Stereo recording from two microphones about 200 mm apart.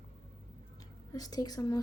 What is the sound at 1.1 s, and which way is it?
Speech, 20° left (ahead or behind).